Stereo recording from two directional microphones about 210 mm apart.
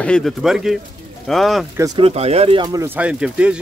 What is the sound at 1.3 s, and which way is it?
Cutlery, centre (ahead or behind).